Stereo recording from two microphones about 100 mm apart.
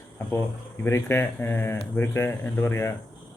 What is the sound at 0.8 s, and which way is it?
A man's voice, 25° left (ahead or behind).